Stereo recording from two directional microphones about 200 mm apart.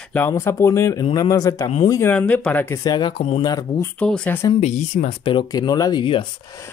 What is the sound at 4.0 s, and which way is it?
Speech, 5° left (ahead or behind).